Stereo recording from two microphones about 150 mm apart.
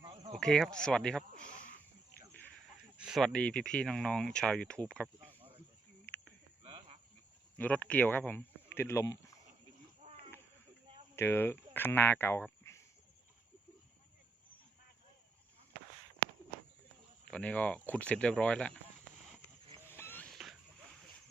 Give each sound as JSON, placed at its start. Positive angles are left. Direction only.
{"t": 0.3, "sound": "speech", "side_deg": 5}
{"t": 3.0, "sound": "speech", "side_deg": 0}
{"t": 6.6, "sound": "cricket", "side_deg": -40}
{"t": 7.6, "sound": "speech", "side_deg": 10}
{"t": 11.1, "sound": "speech", "side_deg": 15}
{"t": 17.2, "sound": "speech", "side_deg": 10}
{"t": 19.9, "sound": "a sound", "side_deg": 15}
{"t": 20.3, "sound": "a sound", "side_deg": 0}